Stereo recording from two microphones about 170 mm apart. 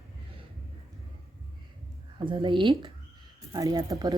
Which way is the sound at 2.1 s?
30° right (ahead or behind).